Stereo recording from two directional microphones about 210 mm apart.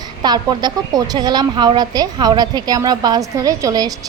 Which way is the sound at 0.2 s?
20° right (ahead or behind).